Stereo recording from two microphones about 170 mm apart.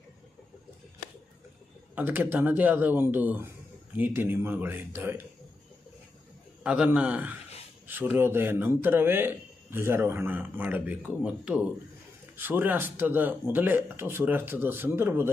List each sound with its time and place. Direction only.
2.0 s a man's voice: 10° right (ahead or behind)
6.6 s a man's voice: 5° right (ahead or behind)